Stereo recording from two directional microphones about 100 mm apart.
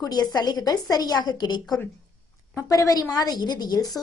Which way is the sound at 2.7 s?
35° left (ahead or behind).